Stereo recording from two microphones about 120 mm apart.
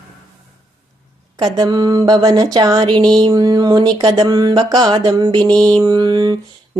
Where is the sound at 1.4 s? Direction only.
35° right (ahead or behind).